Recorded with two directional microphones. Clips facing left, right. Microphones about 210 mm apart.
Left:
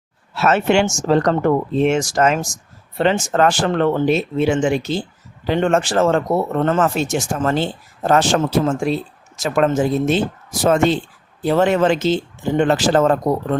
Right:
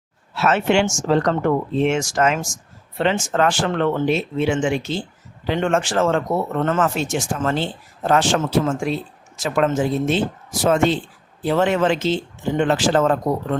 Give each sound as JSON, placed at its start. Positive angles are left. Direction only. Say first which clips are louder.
{"t": 0.3, "sound": "speech", "louder": "left 2 dB", "side_deg": 40}